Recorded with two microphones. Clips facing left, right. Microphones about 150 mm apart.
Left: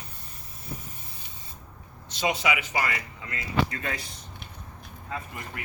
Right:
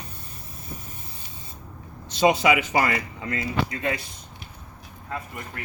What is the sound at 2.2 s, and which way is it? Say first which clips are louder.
Speech: right 8 dB; 45° right (ahead or behind).